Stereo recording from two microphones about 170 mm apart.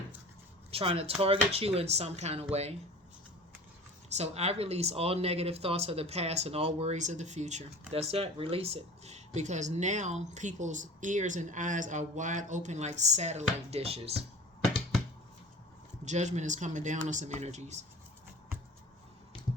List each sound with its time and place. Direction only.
0.7 s speech: 35° right (ahead or behind)
4.1 s speech: 40° right (ahead or behind)
16.0 s speech: 45° right (ahead or behind)